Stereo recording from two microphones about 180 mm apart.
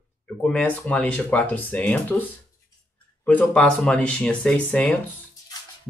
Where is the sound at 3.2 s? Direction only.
5° left (ahead or behind).